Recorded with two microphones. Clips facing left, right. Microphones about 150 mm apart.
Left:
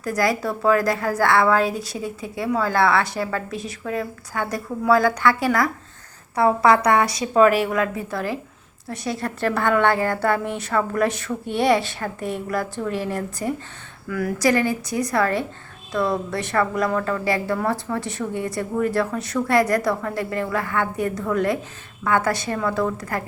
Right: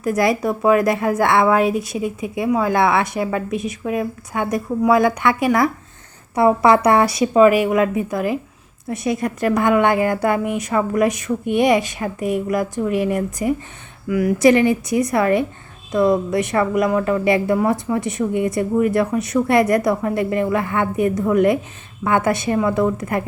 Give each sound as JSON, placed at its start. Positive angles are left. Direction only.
{"t": 0.0, "sound": "a woman's voice", "side_deg": -20}
{"t": 7.3, "sound": "a woman's voice", "side_deg": -10}